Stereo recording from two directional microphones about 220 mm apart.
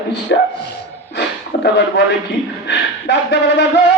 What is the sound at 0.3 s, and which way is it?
Speech, 45° left (ahead or behind).